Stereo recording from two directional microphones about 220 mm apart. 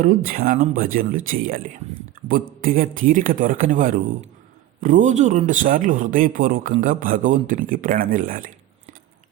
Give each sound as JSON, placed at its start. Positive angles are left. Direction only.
{"t": 0.0, "sound": "speech", "side_deg": -40}